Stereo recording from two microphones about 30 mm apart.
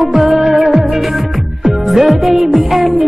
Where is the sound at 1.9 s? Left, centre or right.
Centre.